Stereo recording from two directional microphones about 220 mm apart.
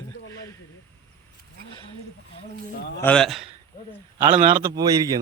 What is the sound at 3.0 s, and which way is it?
Speech, 5° left (ahead or behind).